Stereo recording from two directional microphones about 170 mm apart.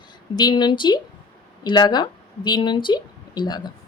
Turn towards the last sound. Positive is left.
turn(degrees=25)  # may be behind; listen again after turning